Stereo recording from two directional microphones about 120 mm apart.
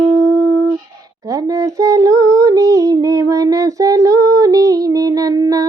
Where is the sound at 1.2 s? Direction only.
30° right (ahead or behind).